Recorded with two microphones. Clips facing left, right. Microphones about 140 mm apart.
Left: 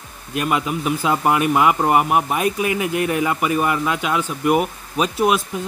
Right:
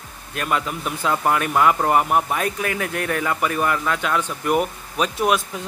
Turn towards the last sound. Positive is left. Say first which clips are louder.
# left 2 dB
turn(degrees=5)  # may be behind; listen again after turning